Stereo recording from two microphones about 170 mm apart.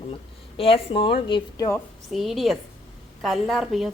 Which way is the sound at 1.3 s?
20° left (ahead or behind).